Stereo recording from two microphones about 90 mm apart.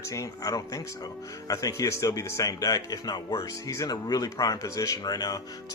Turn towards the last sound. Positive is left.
turn(degrees=45)  # may be behind; listen again after turning